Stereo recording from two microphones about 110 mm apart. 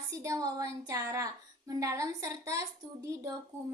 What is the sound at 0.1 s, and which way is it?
A woman's voice, 30° right (ahead or behind).